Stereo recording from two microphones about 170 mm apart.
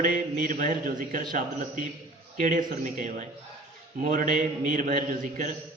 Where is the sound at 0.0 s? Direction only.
55° right (ahead or behind).